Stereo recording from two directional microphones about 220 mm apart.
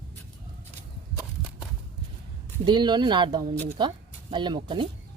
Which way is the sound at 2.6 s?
20° right (ahead or behind).